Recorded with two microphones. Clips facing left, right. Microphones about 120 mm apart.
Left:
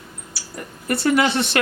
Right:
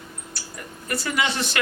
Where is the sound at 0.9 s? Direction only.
60° left (ahead or behind).